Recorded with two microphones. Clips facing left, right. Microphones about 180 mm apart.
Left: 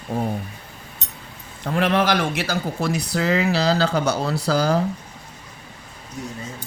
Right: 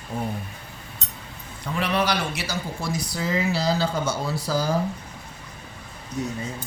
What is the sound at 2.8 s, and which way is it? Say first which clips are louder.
Speech: left 6 dB; 70° left (ahead or behind).